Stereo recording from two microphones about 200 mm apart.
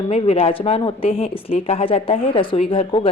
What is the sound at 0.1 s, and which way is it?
Speech, 30° left (ahead or behind).